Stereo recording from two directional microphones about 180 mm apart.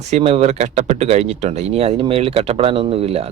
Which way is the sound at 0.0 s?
35° right (ahead or behind).